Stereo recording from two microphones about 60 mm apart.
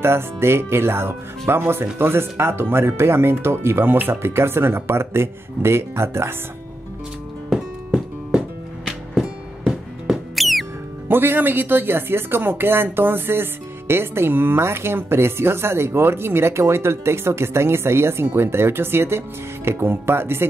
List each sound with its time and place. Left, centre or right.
0.0 s speech: right
7.9 s music: centre
11.1 s speech: right